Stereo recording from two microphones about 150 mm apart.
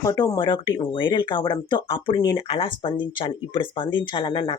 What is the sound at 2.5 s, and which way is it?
Speech, 35° left (ahead or behind).